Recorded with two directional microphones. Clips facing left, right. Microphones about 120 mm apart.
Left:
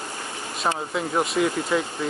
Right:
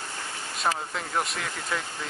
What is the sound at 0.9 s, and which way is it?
Speech, 5° left (ahead or behind).